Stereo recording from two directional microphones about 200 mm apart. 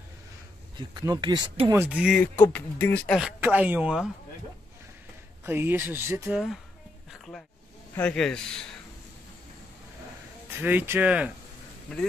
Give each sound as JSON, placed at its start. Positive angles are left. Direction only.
{"t": 0.7, "sound": "speech", "side_deg": -20}
{"t": 2.1, "sound": "speech", "side_deg": 10}
{"t": 3.2, "sound": "speech", "side_deg": -5}
{"t": 5.4, "sound": "speech", "side_deg": -10}
{"t": 7.9, "sound": "speech", "side_deg": 5}
{"t": 10.6, "sound": "speech", "side_deg": -10}